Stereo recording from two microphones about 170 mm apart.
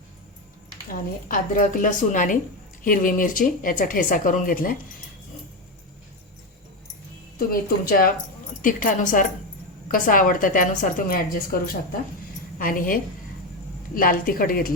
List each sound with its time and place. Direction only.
0.9 s speech: 50° left (ahead or behind)
7.3 s a woman's voice: 60° left (ahead or behind)